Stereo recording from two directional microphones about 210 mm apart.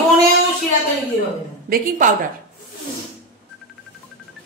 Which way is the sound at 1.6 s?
40° right (ahead or behind).